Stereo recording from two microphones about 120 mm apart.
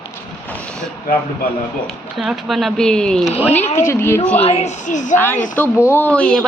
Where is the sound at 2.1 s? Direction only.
Centre (ahead or behind).